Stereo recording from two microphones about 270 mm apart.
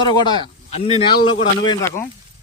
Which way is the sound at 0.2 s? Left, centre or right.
Centre.